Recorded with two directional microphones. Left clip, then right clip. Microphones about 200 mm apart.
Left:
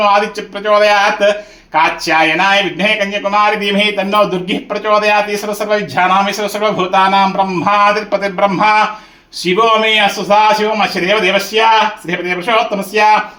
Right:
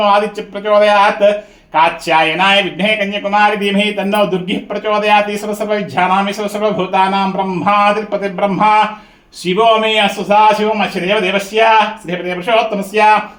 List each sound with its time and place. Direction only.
0.6 s a man's voice: 5° right (ahead or behind)